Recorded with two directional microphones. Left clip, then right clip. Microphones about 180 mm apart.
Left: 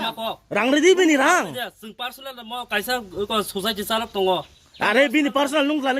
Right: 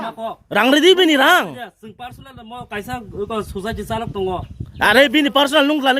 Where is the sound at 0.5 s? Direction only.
25° right (ahead or behind).